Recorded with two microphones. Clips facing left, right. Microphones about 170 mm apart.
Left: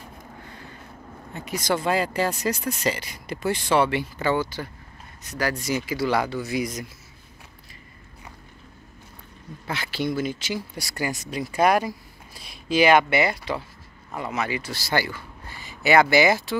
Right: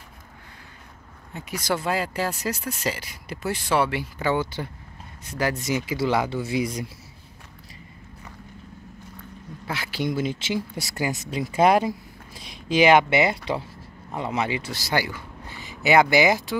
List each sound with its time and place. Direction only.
1.3 s speech: 10° right (ahead or behind)
5.3 s speech: 20° right (ahead or behind)
9.7 s speech: 10° right (ahead or behind)
10.1 s a man's voice: 25° right (ahead or behind)